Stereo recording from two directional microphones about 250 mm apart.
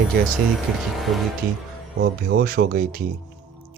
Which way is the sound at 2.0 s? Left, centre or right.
Right.